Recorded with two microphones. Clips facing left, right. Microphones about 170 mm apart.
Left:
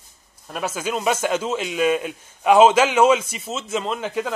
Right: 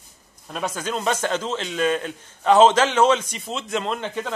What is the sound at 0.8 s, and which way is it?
Speech, 10° left (ahead or behind).